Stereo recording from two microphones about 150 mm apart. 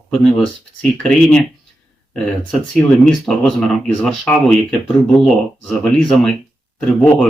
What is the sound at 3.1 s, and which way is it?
Speech, centre (ahead or behind).